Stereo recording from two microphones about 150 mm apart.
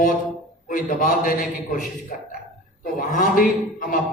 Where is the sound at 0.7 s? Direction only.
60° left (ahead or behind).